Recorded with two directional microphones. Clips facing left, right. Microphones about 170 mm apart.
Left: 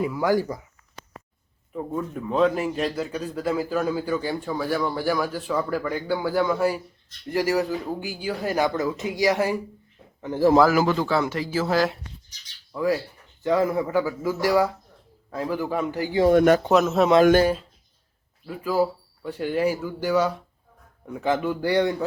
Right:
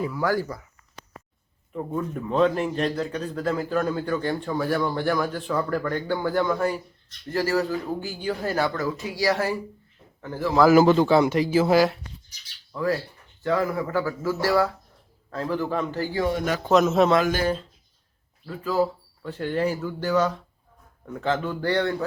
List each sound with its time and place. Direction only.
0.0 s speech: 15° left (ahead or behind)
1.7 s a man's voice: 5° left (ahead or behind)
10.7 s speech: 25° right (ahead or behind)
12.7 s speech: 10° left (ahead or behind)
16.3 s speech: 55° left (ahead or behind)
16.6 s a man's voice: 5° left (ahead or behind)
18.4 s speech: 10° left (ahead or behind)